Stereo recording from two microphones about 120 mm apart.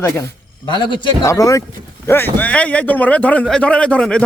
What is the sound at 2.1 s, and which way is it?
A man's voice, 15° left (ahead or behind).